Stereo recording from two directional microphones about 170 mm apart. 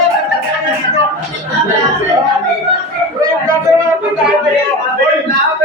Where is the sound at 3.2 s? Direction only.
20° right (ahead or behind).